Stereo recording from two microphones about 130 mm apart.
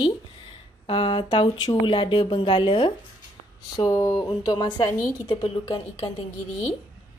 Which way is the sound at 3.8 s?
30° left (ahead or behind).